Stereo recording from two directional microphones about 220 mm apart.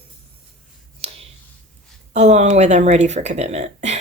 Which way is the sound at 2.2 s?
30° right (ahead or behind).